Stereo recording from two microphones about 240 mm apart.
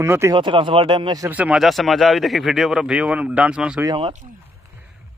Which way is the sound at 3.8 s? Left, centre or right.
Right.